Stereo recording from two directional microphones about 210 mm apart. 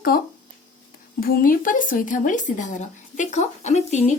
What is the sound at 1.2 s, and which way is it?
Speech, 45° left (ahead or behind).